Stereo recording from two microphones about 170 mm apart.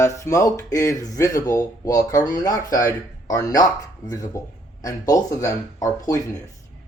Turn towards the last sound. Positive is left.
turn(degrees=20)  # may be behind; listen again after turning